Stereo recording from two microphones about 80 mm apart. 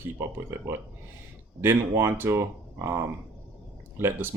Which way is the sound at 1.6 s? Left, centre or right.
Right.